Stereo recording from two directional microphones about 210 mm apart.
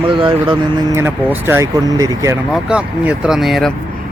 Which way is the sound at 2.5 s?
5° right (ahead or behind).